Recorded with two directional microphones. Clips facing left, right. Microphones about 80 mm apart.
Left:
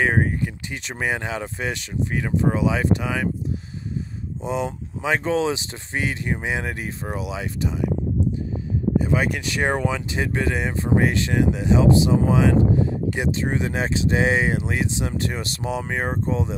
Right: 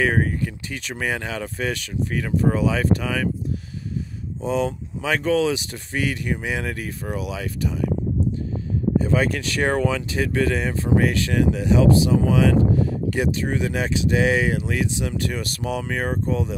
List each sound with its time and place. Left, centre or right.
0.0 s speech: left
4.4 s speech: left
8.9 s speech: centre